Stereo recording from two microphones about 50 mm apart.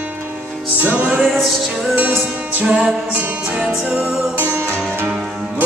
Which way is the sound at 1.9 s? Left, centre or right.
Right.